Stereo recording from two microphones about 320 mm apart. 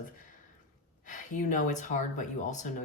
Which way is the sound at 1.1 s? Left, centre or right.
Left.